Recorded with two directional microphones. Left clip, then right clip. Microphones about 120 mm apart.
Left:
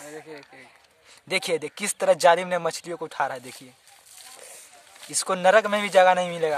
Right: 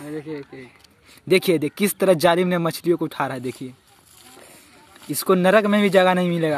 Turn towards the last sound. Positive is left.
turn(degrees=0)  # may be behind; listen again after turning